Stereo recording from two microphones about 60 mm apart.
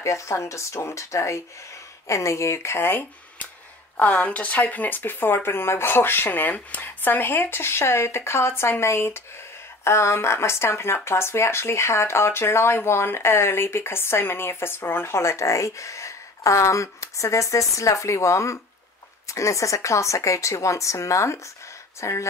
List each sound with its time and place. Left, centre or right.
0.0 s a woman's voice: left